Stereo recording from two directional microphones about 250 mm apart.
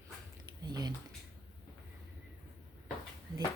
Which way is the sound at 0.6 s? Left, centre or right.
Centre.